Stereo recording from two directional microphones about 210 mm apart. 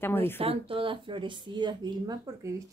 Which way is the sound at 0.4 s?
25° right (ahead or behind).